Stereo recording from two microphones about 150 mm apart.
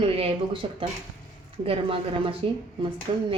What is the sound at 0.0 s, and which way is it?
Speech, 40° right (ahead or behind).